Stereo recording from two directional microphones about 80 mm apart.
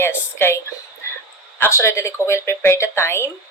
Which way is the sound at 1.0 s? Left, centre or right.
Left.